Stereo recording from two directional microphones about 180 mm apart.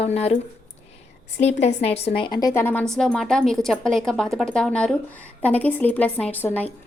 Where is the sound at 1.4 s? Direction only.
40° left (ahead or behind); by 6.7 s 10° left (ahead or behind).